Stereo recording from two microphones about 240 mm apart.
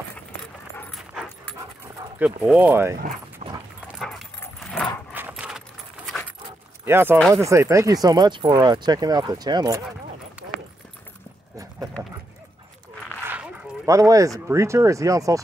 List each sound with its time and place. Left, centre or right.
0.7 s dog: centre
2.1 s speech: centre
3.4 s dog: right
3.8 s dog: centre
5.1 s keys jangling: centre
6.8 s speech: centre
12.0 s dog: centre
13.3 s speech: centre